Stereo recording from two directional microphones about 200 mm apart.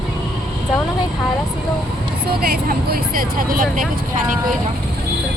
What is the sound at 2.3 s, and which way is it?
Speech, 50° right (ahead or behind).